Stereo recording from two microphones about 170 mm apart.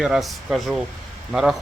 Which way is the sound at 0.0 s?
Centre (ahead or behind).